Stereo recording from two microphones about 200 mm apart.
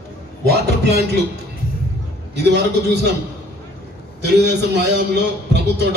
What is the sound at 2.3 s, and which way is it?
Speech, 55° right (ahead or behind).